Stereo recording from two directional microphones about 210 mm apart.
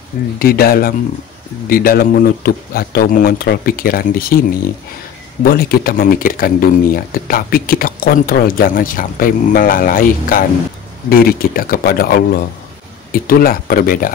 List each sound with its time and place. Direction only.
0.4 s speech: 45° left (ahead or behind)
5.4 s speech: 45° left (ahead or behind)